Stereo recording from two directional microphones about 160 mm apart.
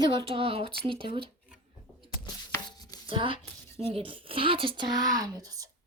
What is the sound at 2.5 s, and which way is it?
Chopping, 25° left (ahead or behind).